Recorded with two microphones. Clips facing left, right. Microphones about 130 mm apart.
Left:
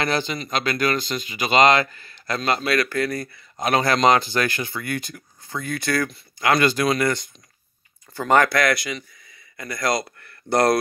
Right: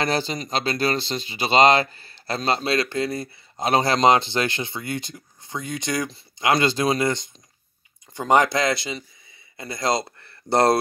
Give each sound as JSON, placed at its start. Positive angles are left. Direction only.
{"t": 0.0, "sound": "speech", "side_deg": -35}